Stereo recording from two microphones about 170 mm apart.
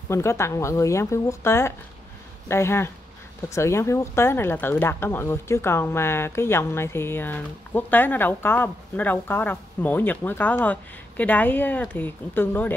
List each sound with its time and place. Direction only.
0.1 s speech: 15° left (ahead or behind)